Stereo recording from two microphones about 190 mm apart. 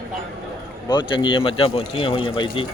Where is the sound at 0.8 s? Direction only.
25° left (ahead or behind).